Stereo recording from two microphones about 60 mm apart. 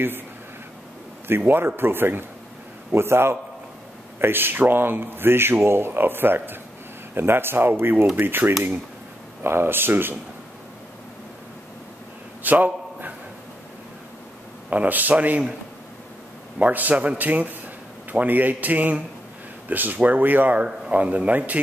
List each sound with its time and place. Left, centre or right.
1.3 s a man's voice: right
12.4 s a sound: right
14.7 s a man's voice: right
16.5 s a man's voice: right